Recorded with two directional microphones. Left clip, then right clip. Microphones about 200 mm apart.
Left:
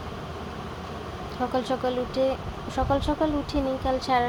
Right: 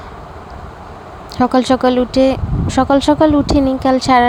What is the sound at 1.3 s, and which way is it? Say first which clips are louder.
Speech: right 14 dB; 45° right (ahead or behind).